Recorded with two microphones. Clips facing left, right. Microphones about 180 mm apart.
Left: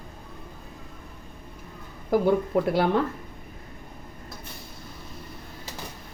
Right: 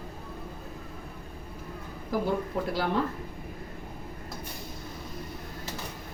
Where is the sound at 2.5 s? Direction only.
65° left (ahead or behind).